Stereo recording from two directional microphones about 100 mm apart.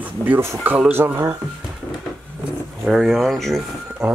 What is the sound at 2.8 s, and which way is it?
Speech, centre (ahead or behind).